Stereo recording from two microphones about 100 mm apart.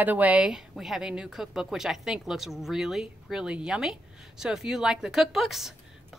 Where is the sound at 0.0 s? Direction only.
15° right (ahead or behind).